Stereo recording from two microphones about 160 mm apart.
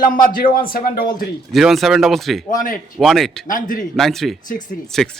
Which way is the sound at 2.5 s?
55° left (ahead or behind).